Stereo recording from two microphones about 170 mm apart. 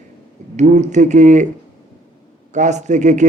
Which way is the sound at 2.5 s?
45° right (ahead or behind).